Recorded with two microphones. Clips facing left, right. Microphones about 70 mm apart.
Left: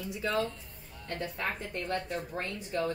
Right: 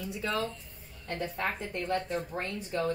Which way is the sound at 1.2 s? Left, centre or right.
Right.